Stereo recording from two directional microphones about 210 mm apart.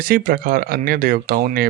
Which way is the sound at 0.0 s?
45° right (ahead or behind).